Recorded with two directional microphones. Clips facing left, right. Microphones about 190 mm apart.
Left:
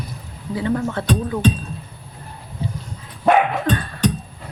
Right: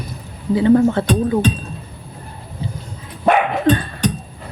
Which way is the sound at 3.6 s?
30° right (ahead or behind).